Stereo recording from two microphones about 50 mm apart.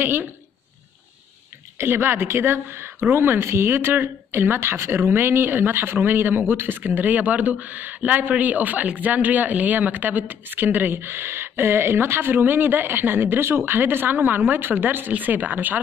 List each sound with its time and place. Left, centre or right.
0.0 s a woman's voice: right
1.8 s a woman's voice: right